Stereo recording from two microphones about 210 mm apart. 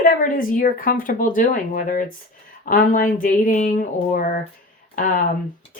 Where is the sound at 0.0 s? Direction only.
40° left (ahead or behind).